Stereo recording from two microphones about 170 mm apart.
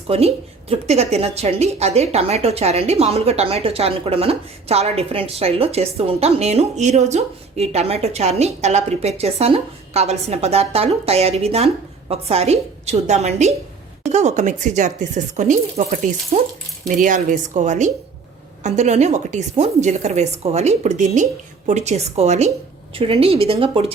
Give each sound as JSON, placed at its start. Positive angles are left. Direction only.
{"t": 0.1, "sound": "speech", "side_deg": -35}